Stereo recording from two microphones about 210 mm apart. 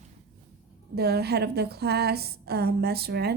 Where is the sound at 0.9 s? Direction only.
50° right (ahead or behind).